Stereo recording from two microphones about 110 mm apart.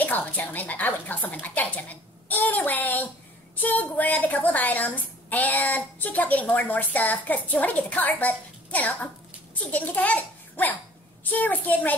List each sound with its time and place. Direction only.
0.0 s a woman's voice: 15° left (ahead or behind)